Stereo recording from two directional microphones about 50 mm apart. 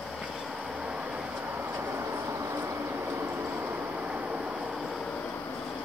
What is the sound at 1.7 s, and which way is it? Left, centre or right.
Vehicle, right.